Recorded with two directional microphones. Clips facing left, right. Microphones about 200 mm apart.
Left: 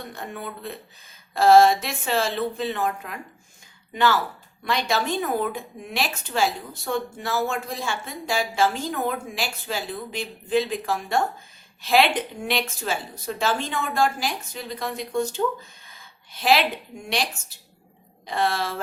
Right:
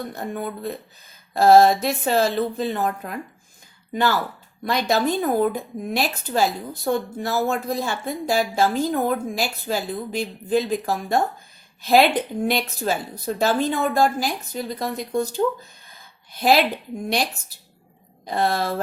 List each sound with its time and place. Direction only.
0.2 s speech: 40° right (ahead or behind)
16.4 s speech: 40° right (ahead or behind)
18.3 s speech: 40° right (ahead or behind)